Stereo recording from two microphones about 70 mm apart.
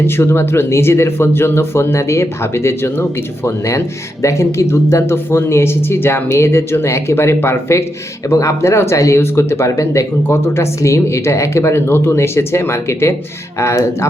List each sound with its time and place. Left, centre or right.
0.0 s speech: left